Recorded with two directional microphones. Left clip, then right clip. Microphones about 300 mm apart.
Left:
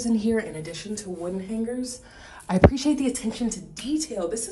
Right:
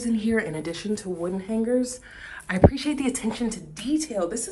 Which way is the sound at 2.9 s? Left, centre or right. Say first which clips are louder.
Left 1 dB; centre.